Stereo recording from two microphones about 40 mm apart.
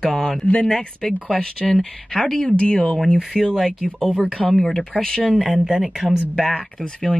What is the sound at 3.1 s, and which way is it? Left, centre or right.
Speech, centre.